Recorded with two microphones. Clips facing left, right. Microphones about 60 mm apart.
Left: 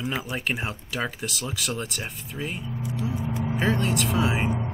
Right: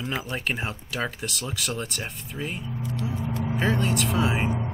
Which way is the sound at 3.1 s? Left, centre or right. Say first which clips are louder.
Left 2 dB; centre.